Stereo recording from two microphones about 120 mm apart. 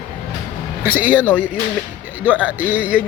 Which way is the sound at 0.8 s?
15° right (ahead or behind).